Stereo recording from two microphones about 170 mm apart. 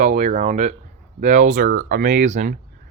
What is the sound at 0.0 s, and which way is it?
Speech, 50° right (ahead or behind).